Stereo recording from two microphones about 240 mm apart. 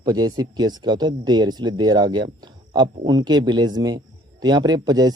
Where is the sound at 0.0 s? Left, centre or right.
Centre.